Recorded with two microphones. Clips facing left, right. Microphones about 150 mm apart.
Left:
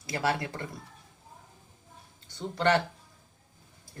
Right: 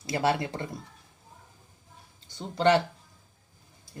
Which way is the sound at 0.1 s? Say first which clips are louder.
Right 3 dB; 20° right (ahead or behind).